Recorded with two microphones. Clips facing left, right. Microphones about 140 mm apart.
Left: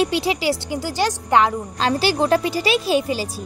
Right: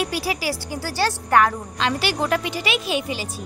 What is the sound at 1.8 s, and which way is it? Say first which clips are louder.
Speech: left 4 dB; 35° left (ahead or behind).